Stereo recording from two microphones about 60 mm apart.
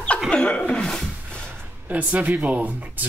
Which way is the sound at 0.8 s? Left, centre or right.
Centre.